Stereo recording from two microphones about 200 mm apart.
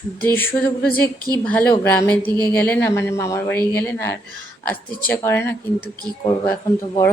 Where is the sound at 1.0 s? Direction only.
20° right (ahead or behind).